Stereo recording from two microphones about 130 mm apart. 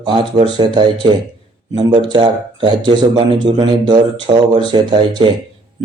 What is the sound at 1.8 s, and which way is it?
A man's voice, 35° right (ahead or behind).